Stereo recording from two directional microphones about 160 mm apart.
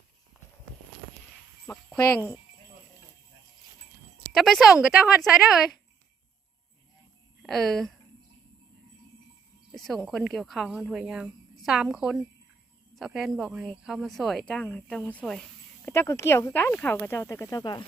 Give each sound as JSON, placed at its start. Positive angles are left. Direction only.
{"t": 1.6, "sound": "speech", "side_deg": 10}
{"t": 4.3, "sound": "speech", "side_deg": 0}
{"t": 7.4, "sound": "speech", "side_deg": 0}
{"t": 9.7, "sound": "speech", "side_deg": 0}
{"t": 15.9, "sound": "speech", "side_deg": 15}